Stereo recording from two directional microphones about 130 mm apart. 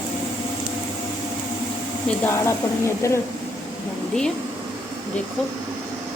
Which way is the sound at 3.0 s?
20° left (ahead or behind).